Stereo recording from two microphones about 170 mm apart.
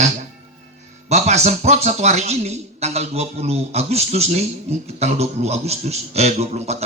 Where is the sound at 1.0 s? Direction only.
40° right (ahead or behind).